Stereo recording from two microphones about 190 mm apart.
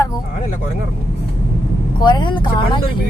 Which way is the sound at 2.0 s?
25° left (ahead or behind).